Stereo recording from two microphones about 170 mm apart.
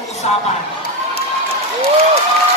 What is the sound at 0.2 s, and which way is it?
Speech, 40° left (ahead or behind).